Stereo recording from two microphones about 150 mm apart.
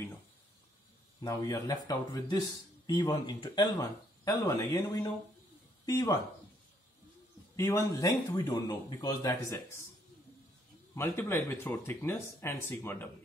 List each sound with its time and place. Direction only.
1.2 s speech: 25° left (ahead or behind)
7.5 s speech: 20° left (ahead or behind)
11.0 s speech: 15° left (ahead or behind)